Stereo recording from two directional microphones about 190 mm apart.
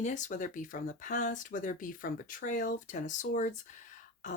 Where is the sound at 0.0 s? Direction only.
40° left (ahead or behind).